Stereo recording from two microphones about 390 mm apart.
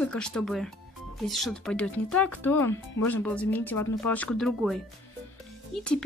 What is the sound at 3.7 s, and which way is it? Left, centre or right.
Speech, left.